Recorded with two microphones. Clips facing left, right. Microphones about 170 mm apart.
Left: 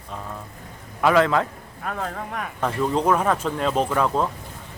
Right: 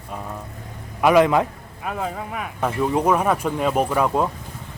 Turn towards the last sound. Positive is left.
turn(degrees=-10)  # may be behind; listen again after turning